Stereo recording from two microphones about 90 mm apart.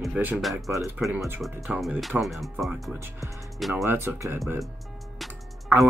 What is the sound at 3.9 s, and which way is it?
Speech, 25° right (ahead or behind).